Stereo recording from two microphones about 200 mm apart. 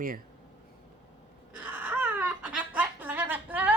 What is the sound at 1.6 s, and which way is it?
Laughter, 10° right (ahead or behind).